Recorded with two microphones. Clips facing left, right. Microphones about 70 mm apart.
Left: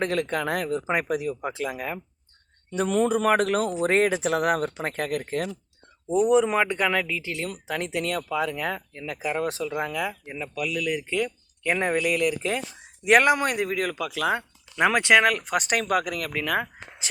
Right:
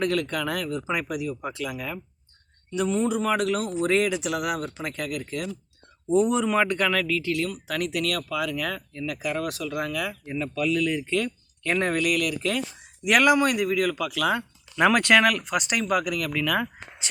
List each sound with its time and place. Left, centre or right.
0.0 s speech: left
2.8 s speech: left
6.1 s speech: centre
15.3 s speech: left